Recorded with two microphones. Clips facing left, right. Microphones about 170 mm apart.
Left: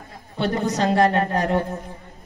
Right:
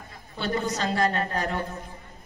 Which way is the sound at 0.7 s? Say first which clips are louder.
Left 10 dB; 65° left (ahead or behind).